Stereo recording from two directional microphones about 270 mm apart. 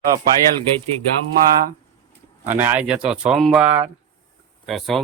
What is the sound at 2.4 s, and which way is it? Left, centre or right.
Speech, centre.